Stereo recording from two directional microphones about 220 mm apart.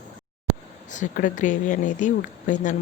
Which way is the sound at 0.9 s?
35° left (ahead or behind).